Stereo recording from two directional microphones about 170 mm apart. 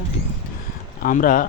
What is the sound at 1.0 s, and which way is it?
Speech, 50° left (ahead or behind).